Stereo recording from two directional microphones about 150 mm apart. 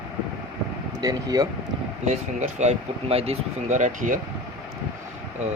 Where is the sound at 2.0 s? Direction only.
50° right (ahead or behind).